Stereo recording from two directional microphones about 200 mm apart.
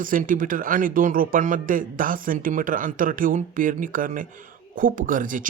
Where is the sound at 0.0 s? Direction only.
45° right (ahead or behind).